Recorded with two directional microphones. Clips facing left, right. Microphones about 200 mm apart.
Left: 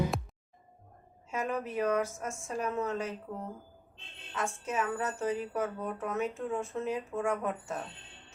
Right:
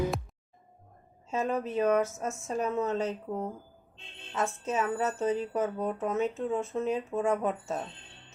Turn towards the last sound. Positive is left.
turn(degrees=-20)  # may be behind; listen again after turning